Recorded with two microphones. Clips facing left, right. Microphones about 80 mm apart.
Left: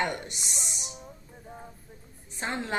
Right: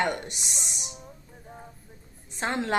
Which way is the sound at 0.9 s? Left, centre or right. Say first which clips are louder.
Even; centre.